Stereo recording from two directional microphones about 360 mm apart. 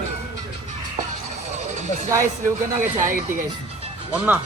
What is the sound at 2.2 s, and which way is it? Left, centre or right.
Speech, right.